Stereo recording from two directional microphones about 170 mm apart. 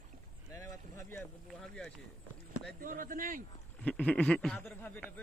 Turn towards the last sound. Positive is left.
turn(degrees=10)  # may be behind; listen again after turning